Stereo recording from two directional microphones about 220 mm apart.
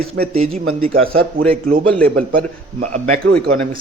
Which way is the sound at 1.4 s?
40° right (ahead or behind).